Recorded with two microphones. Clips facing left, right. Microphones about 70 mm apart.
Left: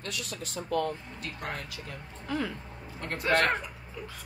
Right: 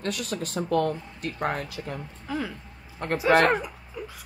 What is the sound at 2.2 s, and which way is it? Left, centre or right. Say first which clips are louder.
Speech: even; centre.